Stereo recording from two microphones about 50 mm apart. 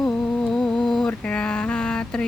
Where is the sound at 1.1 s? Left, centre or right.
Left.